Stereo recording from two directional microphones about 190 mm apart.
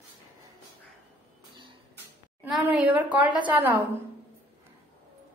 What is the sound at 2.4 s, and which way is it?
A woman's voice, 10° right (ahead or behind).